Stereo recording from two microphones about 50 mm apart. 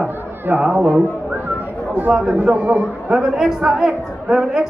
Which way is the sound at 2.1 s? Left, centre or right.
Centre.